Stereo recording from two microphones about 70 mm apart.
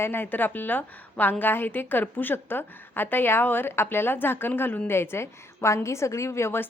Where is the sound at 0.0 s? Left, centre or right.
Left.